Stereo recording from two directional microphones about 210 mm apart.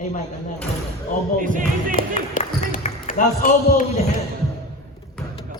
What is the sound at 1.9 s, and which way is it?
Speech, 40° left (ahead or behind).